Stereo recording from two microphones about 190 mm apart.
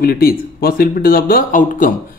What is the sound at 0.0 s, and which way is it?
Speech, 50° left (ahead or behind).